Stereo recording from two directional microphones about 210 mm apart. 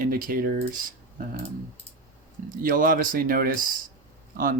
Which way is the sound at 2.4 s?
40° right (ahead or behind).